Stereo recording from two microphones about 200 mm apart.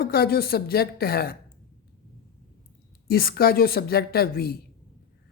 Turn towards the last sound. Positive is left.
turn(degrees=50)  # may be behind; listen again after turning